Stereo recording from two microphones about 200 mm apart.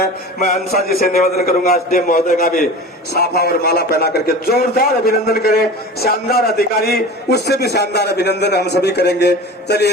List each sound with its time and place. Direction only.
0.0 s a man's voice: 45° left (ahead or behind)
3.1 s a man's voice: 55° left (ahead or behind)